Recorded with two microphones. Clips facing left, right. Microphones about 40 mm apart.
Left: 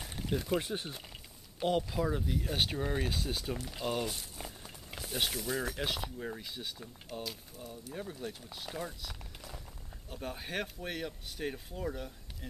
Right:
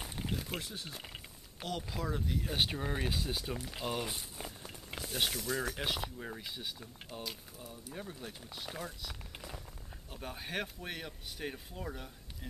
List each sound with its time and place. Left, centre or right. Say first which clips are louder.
0.6 s speech: left 8 dB; left
1.9 s speech: left 4 dB; centre